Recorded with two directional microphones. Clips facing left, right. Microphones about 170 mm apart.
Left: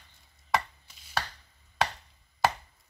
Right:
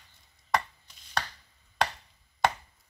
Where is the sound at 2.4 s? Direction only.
5° left (ahead or behind).